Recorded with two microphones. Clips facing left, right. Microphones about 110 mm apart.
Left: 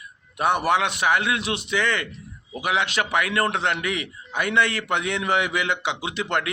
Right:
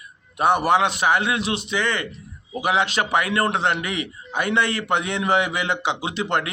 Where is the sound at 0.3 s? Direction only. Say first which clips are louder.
Right 3 dB; 30° right (ahead or behind).